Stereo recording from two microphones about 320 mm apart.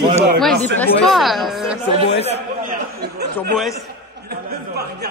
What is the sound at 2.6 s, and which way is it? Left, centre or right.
Speech, right.